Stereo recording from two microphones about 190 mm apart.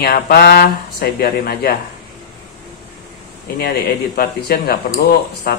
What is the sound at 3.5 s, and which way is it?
Speech, 55° left (ahead or behind).